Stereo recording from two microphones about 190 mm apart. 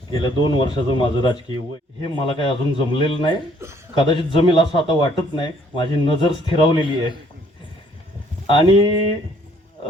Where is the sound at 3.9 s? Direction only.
25° left (ahead or behind).